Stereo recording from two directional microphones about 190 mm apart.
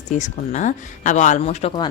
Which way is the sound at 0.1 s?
40° left (ahead or behind).